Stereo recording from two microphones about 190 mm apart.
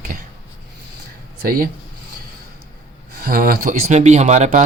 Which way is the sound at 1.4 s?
50° right (ahead or behind).